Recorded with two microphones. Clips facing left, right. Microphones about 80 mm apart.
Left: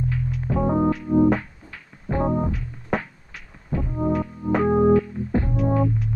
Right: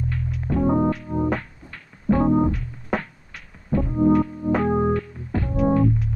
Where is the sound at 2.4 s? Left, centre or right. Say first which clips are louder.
Right 4 dB; centre.